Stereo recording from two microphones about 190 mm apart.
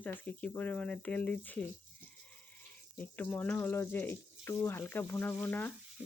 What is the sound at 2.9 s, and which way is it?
Speech, 10° left (ahead or behind).